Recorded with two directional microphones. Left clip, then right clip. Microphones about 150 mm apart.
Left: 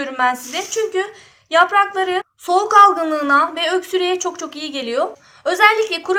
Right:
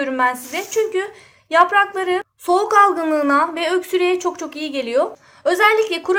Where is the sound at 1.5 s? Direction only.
55° right (ahead or behind).